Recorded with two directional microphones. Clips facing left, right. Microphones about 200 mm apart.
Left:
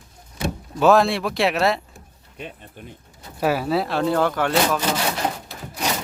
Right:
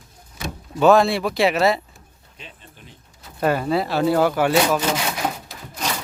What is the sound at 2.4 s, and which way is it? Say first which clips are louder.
Speech: left 8 dB; 55° left (ahead or behind).